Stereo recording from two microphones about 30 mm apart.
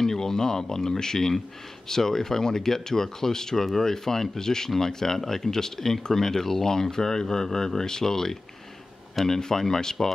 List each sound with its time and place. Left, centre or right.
0.0 s speech: centre
9.4 s speech: centre